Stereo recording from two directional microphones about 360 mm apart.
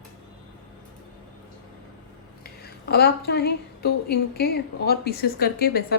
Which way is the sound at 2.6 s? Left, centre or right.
Left.